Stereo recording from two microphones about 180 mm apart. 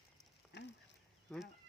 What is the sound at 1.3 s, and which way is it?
Speech, 5° left (ahead or behind).